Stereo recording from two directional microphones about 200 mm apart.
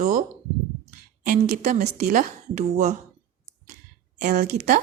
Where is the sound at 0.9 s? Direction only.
40° right (ahead or behind).